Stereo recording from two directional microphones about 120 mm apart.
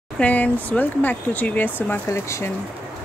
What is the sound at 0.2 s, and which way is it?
Speech, 15° left (ahead or behind).